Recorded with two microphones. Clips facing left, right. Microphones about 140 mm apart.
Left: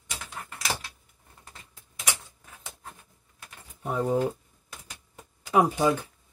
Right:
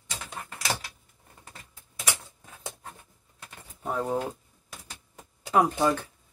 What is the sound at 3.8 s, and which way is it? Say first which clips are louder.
Speech: left 3 dB; 5° left (ahead or behind).